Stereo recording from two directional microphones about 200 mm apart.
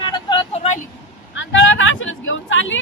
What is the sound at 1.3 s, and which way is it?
Speech, 70° left (ahead or behind).